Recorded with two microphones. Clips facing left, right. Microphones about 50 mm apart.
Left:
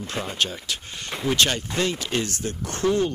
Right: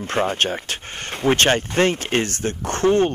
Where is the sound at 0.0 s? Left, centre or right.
Right.